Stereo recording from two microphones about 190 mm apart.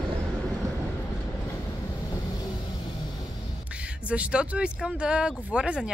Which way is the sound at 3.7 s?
5° right (ahead or behind).